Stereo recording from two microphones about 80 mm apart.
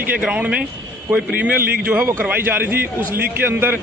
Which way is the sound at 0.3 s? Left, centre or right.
Centre.